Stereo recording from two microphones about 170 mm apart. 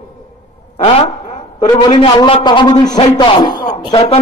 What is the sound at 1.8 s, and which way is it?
A man's voice, 30° left (ahead or behind).